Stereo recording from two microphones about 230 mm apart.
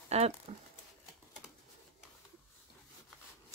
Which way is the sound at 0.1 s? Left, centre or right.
Right.